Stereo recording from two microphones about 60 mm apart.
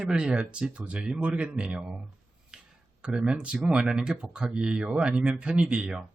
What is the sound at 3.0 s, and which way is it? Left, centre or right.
Speech, centre.